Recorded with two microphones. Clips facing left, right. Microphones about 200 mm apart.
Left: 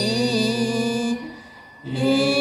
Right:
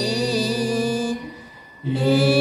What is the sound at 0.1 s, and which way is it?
Music, 5° right (ahead or behind).